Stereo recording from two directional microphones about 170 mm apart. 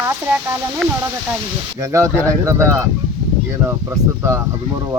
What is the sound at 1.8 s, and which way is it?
Speech, 20° right (ahead or behind).